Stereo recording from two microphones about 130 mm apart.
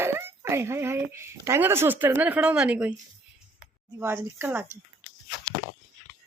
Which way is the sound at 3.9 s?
20° right (ahead or behind).